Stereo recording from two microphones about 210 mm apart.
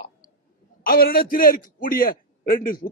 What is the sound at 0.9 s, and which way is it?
A man's voice, 45° left (ahead or behind).